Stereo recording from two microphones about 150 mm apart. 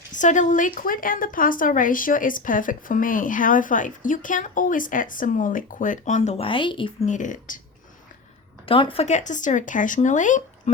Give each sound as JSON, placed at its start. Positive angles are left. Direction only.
{"t": 0.1, "sound": "a woman's voice", "side_deg": 55}
{"t": 7.0, "sound": "a woman's voice", "side_deg": 55}
{"t": 8.6, "sound": "a woman's voice", "side_deg": 35}